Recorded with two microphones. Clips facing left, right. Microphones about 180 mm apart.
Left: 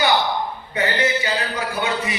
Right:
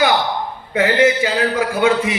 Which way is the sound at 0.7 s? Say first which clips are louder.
Right 8 dB; 90° right.